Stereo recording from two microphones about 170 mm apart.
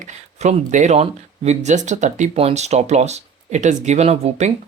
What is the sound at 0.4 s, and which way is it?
Speech, 45° right (ahead or behind).